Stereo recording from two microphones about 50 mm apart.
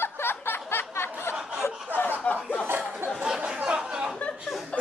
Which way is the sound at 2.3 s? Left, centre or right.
Left.